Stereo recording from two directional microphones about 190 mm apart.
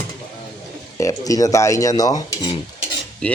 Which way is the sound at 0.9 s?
15° left (ahead or behind).